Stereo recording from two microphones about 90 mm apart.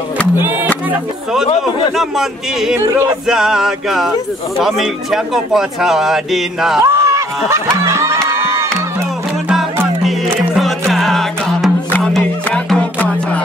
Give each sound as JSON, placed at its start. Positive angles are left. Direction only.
{"t": 2.0, "sound": "speech", "side_deg": -5}
{"t": 6.9, "sound": "speech", "side_deg": -35}
{"t": 7.8, "sound": "crowd", "side_deg": -30}
{"t": 10.5, "sound": "music", "side_deg": 0}